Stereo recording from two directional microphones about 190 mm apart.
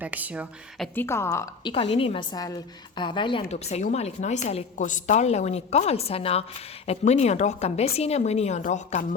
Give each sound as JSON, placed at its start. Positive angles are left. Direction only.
{"t": 0.0, "sound": "speech", "side_deg": -10}
{"t": 0.9, "sound": "a woman's voice", "side_deg": 15}
{"t": 1.7, "sound": "a woman's voice", "side_deg": 30}
{"t": 3.5, "sound": "a woman's voice", "side_deg": 35}